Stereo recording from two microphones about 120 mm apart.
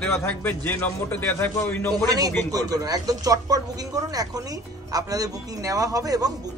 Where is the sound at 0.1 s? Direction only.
20° left (ahead or behind).